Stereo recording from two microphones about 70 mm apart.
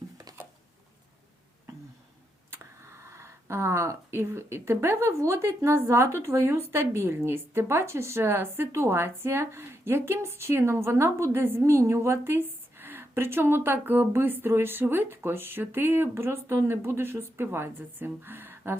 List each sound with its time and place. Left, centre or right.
2.5 s speech: right